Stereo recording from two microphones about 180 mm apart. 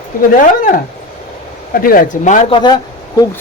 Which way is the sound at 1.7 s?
50° left (ahead or behind).